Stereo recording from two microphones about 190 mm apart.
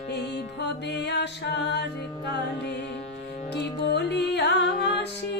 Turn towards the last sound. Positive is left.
turn(degrees=65)  # may be behind; listen again after turning